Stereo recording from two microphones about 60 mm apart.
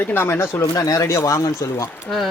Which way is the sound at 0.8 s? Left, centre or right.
Left.